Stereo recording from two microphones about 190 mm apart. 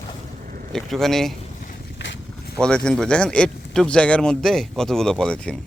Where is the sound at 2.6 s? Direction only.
5° left (ahead or behind).